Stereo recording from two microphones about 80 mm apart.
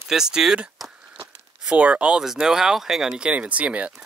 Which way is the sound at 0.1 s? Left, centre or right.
Centre.